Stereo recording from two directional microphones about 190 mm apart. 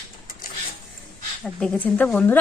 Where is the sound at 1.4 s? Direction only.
5° left (ahead or behind).